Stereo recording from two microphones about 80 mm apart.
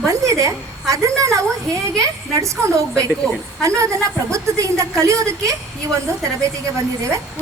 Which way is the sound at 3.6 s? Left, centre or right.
Right.